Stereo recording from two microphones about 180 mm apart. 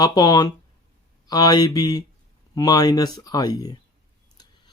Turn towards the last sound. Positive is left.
turn(degrees=20)  # may be behind; listen again after turning